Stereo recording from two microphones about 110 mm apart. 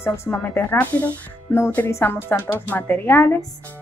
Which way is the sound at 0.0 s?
20° left (ahead or behind).